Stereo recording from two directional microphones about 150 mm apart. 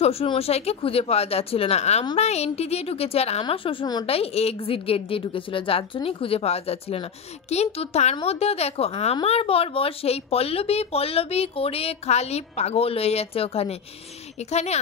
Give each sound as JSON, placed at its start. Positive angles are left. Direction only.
{"t": 0.0, "sound": "speech", "side_deg": 40}